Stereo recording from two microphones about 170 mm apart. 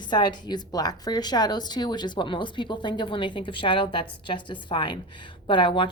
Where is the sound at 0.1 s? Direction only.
25° left (ahead or behind).